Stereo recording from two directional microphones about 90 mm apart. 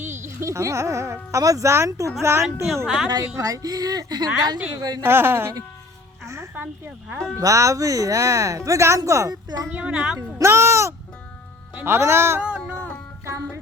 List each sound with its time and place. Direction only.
0.3 s speech: 35° right (ahead or behind)
2.8 s a woman's voice: 5° right (ahead or behind)
3.3 s speech: 40° right (ahead or behind)
5.0 s a woman's voice: 25° right (ahead or behind)
6.5 s speech: 20° right (ahead or behind)
7.3 s speech: 35° right (ahead or behind)
9.3 s speech: 50° right (ahead or behind)
9.7 s speech: 15° right (ahead or behind)
10.3 s music: 30° right (ahead or behind)
11.9 s speech: 30° right (ahead or behind)
13.2 s music: 30° right (ahead or behind)